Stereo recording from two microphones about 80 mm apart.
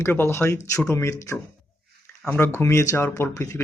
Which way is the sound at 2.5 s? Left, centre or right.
Left.